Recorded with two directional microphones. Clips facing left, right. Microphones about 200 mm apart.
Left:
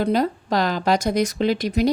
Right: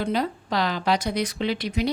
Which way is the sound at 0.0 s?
45° left (ahead or behind).